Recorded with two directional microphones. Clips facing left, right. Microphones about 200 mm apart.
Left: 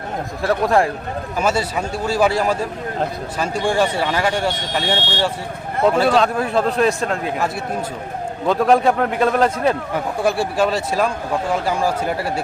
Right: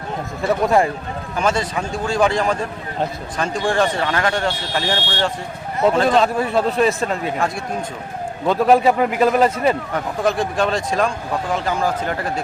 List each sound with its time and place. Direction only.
0.4 s a man's voice: centre (ahead or behind)
9.9 s speech: 10° left (ahead or behind)